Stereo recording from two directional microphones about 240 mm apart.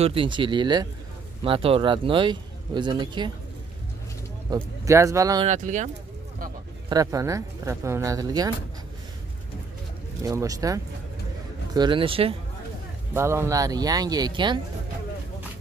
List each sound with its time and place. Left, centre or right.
0.0 s a man's voice: right
4.5 s speech: centre
5.5 s a man's voice: right
6.9 s speech: centre
10.2 s a man's voice: centre
13.1 s speech: centre